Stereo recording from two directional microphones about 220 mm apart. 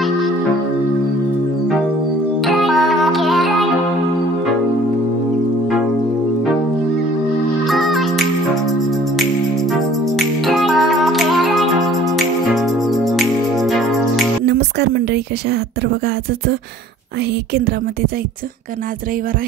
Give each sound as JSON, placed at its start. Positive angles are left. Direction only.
{"t": 2.4, "sound": "music", "side_deg": 0}
{"t": 7.6, "sound": "music", "side_deg": 0}
{"t": 9.7, "sound": "music", "side_deg": 0}
{"t": 14.4, "sound": "a sound", "side_deg": -50}
{"t": 17.6, "sound": "speech", "side_deg": -45}